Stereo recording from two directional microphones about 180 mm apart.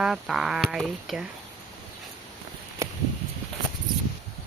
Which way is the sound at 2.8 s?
15° right (ahead or behind).